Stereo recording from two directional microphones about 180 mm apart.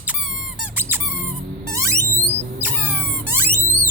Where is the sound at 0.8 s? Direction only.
10° right (ahead or behind).